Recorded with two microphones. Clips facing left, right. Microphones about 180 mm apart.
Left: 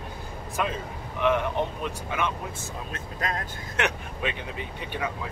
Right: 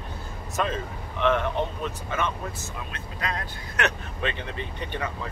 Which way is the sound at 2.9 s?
40° left (ahead or behind).